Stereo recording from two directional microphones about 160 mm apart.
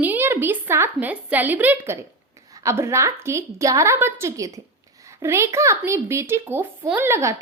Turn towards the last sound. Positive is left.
turn(degrees=-15)  # may be behind; listen again after turning